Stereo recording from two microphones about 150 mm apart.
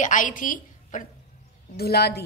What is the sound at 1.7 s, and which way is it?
Speech, 90° left.